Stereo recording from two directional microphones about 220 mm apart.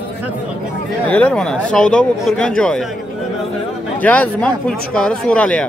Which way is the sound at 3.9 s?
5° left (ahead or behind).